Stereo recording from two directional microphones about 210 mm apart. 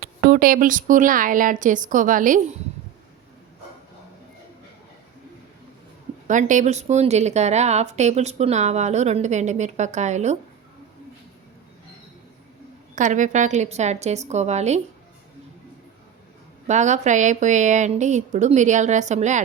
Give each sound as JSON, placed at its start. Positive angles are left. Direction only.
{"t": 0.0, "sound": "a woman's voice", "side_deg": -45}
{"t": 6.2, "sound": "a woman's voice", "side_deg": -35}
{"t": 13.0, "sound": "a woman's voice", "side_deg": -35}
{"t": 16.6, "sound": "a woman's voice", "side_deg": -35}